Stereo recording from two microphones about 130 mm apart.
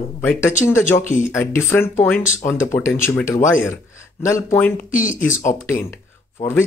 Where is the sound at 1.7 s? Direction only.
15° left (ahead or behind).